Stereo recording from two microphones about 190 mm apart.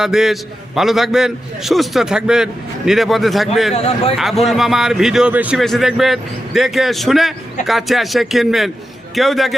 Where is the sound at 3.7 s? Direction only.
30° left (ahead or behind).